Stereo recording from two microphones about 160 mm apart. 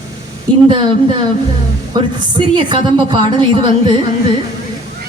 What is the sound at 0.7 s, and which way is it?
Speech, 35° right (ahead or behind).